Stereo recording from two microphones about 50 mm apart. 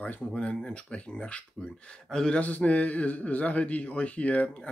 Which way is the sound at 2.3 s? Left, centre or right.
Left.